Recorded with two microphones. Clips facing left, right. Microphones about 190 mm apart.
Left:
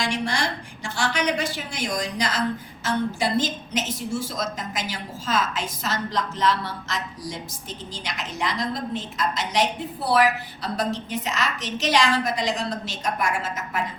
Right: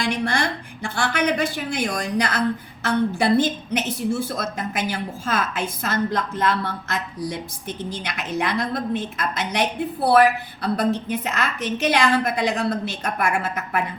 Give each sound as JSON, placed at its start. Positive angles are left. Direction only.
{"t": 0.0, "sound": "a woman's voice", "side_deg": -55}